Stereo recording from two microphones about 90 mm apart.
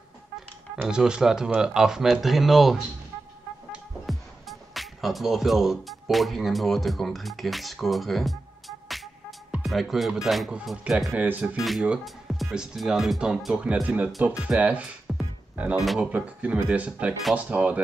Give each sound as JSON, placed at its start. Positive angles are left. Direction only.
{"t": 0.8, "sound": "speech", "side_deg": -10}
{"t": 4.0, "sound": "speech", "side_deg": 0}
{"t": 11.1, "sound": "speech", "side_deg": -15}
{"t": 11.5, "sound": "speech", "side_deg": 0}
{"t": 15.1, "sound": "music", "side_deg": 0}
{"t": 15.5, "sound": "speech", "side_deg": -15}